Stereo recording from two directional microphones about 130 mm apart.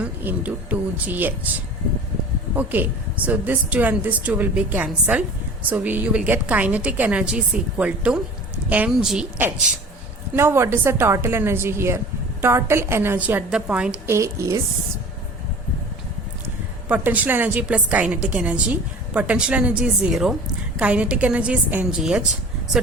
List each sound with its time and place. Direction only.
0.0 s a woman's voice: 10° right (ahead or behind)
2.6 s a woman's voice: 15° right (ahead or behind)
10.3 s a woman's voice: 20° right (ahead or behind)
14.1 s a woman's voice: 20° right (ahead or behind)
16.9 s a woman's voice: 10° right (ahead or behind)